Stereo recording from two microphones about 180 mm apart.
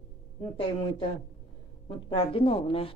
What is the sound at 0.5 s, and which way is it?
A woman's voice, 30° left (ahead or behind).